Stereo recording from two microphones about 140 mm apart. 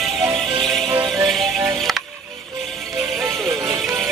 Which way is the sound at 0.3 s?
40° right (ahead or behind).